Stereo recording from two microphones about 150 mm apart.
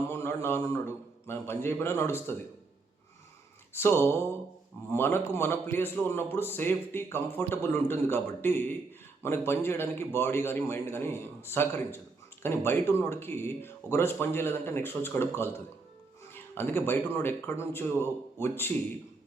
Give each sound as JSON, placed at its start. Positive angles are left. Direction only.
{"t": 0.1, "sound": "a sound", "side_deg": 15}
{"t": 0.4, "sound": "a man's voice", "side_deg": 20}
{"t": 3.8, "sound": "a man's voice", "side_deg": 15}